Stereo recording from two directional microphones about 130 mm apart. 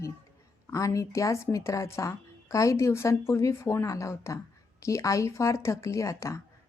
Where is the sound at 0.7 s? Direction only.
25° left (ahead or behind).